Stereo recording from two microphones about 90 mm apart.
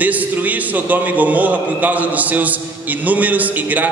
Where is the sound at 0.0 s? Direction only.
20° right (ahead or behind).